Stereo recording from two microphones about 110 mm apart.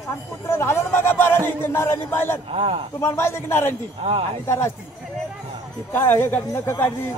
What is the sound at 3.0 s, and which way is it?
A woman's voice, 25° left (ahead or behind).